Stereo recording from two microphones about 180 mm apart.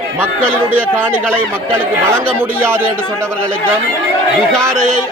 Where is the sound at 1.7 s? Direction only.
15° right (ahead or behind).